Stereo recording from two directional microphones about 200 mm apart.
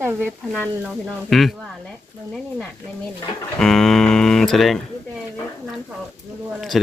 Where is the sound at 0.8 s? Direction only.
Centre (ahead or behind).